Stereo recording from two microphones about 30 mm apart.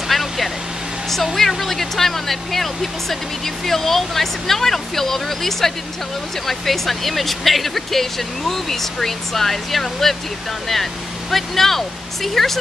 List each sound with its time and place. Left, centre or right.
0.1 s vehicle: centre
1.1 s speech: centre